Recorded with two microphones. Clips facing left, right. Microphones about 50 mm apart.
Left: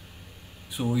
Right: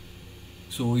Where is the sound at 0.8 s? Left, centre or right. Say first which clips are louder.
Right 1 dB; centre.